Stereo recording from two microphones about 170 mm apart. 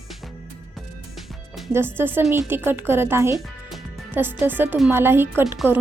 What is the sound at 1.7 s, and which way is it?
Speech, 15° right (ahead or behind).